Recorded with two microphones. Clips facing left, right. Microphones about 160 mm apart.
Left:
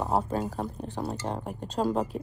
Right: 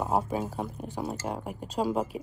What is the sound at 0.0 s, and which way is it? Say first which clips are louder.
Speech: left 1 dB; 10° right (ahead or behind).